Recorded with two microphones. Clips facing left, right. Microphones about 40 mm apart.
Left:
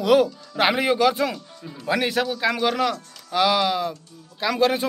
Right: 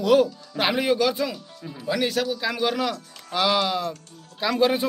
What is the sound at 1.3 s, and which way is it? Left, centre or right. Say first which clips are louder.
Speech: left 1 dB; centre.